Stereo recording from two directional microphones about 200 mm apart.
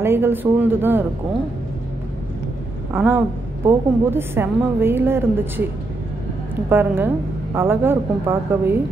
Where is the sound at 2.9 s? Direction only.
10° right (ahead or behind).